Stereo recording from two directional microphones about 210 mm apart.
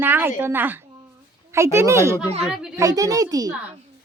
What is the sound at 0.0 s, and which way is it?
Speech, 10° right (ahead or behind).